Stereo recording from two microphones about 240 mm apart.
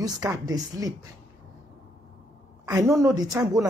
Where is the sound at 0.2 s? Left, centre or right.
Centre.